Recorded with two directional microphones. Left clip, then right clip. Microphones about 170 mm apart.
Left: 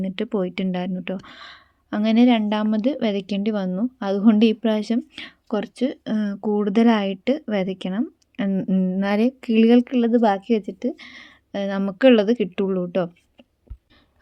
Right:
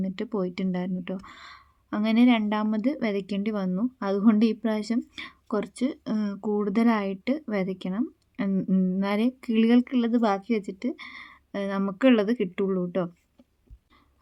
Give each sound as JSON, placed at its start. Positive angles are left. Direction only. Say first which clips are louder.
{"t": 0.0, "sound": "speech", "louder": "left 5 dB", "side_deg": 20}